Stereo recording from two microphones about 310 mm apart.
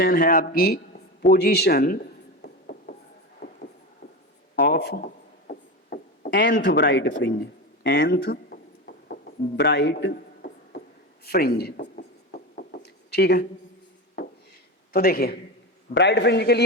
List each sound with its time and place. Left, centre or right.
0.0 s speech: left
1.2 s a sound: left
3.4 s heart murmur: left
4.7 s a man's voice: left
7.9 s a sound: left
11.3 s a man's voice: left
12.3 s knock: left
14.9 s a man's voice: left